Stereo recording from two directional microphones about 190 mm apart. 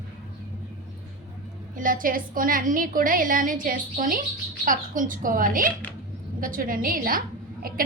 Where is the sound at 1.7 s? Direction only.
45° right (ahead or behind).